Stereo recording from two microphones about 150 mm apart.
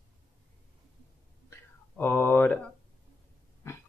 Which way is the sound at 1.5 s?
15° left (ahead or behind).